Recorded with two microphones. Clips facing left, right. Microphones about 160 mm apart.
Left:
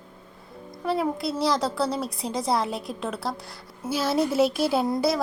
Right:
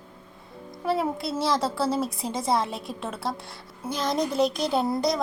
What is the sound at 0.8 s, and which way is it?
Speech, centre (ahead or behind).